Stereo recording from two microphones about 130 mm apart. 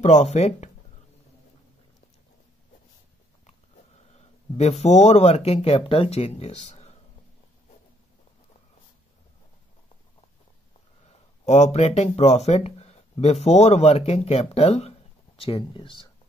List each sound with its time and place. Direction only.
0.0 s speech: 60° left (ahead or behind)
4.1 s speech: 55° left (ahead or behind)
11.4 s speech: 60° left (ahead or behind); by 16.0 s 40° left (ahead or behind)